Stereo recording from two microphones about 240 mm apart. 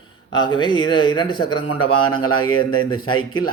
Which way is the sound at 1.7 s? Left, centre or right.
Left.